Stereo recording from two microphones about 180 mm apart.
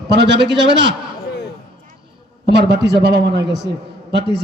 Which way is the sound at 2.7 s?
65° right (ahead or behind).